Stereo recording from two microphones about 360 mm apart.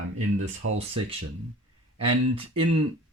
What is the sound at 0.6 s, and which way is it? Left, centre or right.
Speech, right.